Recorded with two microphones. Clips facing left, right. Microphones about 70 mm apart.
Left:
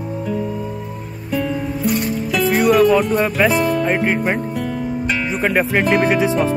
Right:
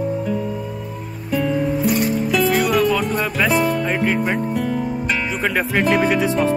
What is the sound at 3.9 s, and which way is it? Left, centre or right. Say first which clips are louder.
Speech: left 1 dB; centre.